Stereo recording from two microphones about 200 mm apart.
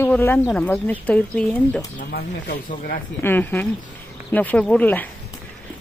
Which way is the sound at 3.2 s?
10° left (ahead or behind).